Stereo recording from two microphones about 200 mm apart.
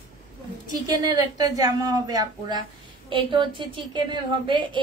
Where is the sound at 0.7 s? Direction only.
20° right (ahead or behind).